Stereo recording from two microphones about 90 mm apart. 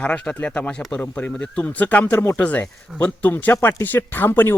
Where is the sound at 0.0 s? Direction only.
15° left (ahead or behind).